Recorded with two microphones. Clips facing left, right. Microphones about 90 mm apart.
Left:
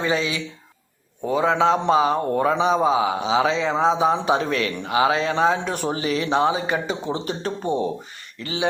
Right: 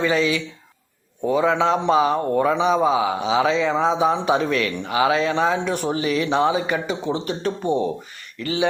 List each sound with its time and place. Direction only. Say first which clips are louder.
0.0 s a man's voice: right 3 dB; 25° left (ahead or behind)